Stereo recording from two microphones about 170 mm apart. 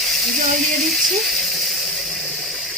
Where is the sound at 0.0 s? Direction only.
Centre (ahead or behind).